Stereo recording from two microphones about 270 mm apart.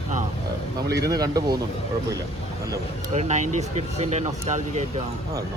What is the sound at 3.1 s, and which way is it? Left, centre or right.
Speech, right.